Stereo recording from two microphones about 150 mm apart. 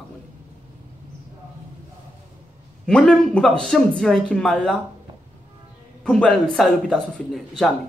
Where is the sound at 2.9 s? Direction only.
5° left (ahead or behind).